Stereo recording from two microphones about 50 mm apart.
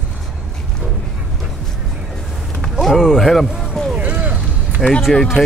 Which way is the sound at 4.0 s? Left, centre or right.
Right.